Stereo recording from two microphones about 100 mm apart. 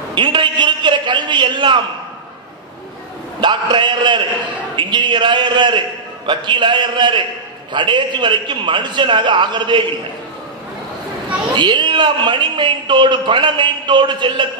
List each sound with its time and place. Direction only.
0.1 s a man's voice: 55° right (ahead or behind)
3.3 s a man's voice: 55° right (ahead or behind)
11.5 s a man's voice: 50° right (ahead or behind)